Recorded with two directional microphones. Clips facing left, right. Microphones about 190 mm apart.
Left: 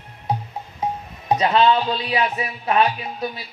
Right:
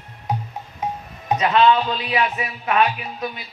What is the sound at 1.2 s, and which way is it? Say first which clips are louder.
A man's voice: even; 30° left (ahead or behind).